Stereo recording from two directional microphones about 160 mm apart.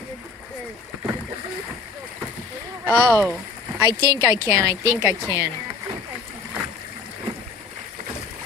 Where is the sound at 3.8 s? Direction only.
25° right (ahead or behind).